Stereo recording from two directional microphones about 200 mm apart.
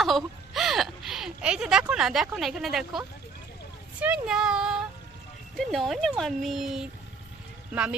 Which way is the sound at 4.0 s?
5° right (ahead or behind).